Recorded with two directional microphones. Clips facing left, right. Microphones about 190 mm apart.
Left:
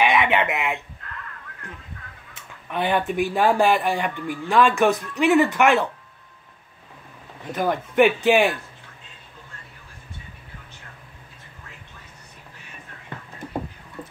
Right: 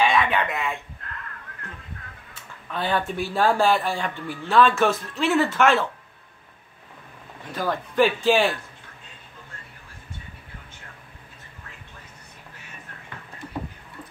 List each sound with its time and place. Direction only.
0.0 s speech: 20° left (ahead or behind)
2.7 s speech: 20° left (ahead or behind)
7.5 s speech: 20° left (ahead or behind)